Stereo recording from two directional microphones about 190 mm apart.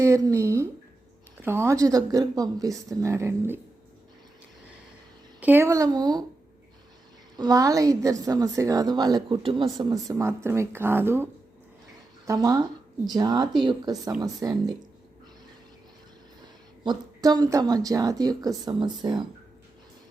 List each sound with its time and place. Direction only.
0.0 s a woman's voice: 15° right (ahead or behind)
5.4 s a woman's voice: 10° right (ahead or behind)
7.3 s a woman's voice: 20° right (ahead or behind)
16.8 s a woman's voice: 20° right (ahead or behind)